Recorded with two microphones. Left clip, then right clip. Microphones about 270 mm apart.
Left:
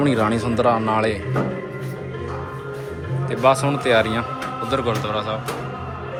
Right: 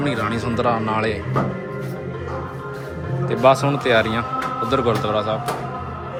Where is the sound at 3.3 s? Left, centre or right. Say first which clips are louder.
Right 2 dB; centre.